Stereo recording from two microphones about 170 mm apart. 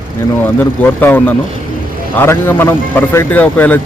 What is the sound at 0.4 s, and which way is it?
A man's voice, 10° left (ahead or behind).